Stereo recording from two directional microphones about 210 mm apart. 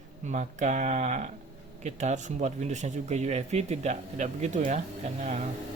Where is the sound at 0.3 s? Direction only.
35° right (ahead or behind).